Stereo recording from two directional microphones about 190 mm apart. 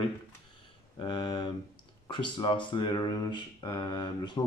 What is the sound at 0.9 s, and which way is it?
Speech, 25° left (ahead or behind).